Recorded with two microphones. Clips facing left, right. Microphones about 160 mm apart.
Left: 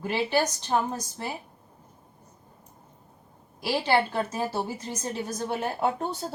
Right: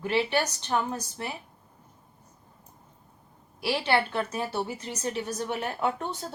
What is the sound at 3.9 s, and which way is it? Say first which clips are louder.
Speech: left 2 dB; 20° left (ahead or behind).